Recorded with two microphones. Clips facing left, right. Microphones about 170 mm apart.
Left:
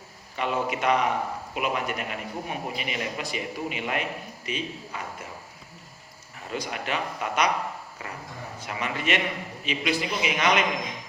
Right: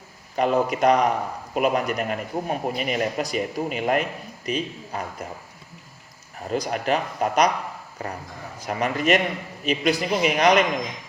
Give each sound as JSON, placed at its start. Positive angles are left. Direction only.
{"t": 0.3, "sound": "a man's voice", "side_deg": -40}
{"t": 6.5, "sound": "a man's voice", "side_deg": -40}